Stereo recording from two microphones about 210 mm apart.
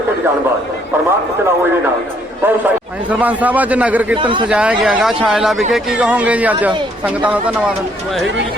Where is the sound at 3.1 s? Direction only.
5° right (ahead or behind).